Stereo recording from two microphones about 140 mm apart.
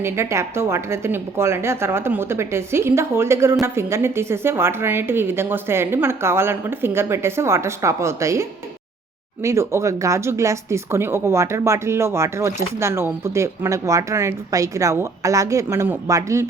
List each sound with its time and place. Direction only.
0.0 s speech: 20° right (ahead or behind)